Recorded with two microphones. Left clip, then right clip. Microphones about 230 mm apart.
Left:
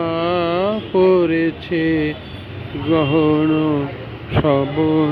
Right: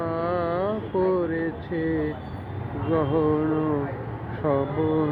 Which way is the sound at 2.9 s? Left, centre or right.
Left.